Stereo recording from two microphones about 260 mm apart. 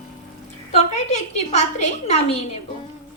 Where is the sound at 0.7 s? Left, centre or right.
Left.